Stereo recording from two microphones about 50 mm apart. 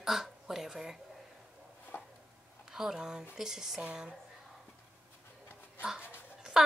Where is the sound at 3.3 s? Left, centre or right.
Centre.